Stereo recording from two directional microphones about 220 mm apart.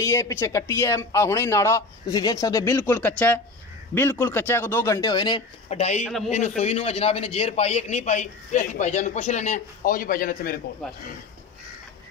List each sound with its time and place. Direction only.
0.0 s speech: 15° left (ahead or behind); by 6.0 s 30° left (ahead or behind)
6.0 s a man's voice: centre (ahead or behind)
6.3 s a man's voice: 30° left (ahead or behind)
10.8 s a man's voice: centre (ahead or behind)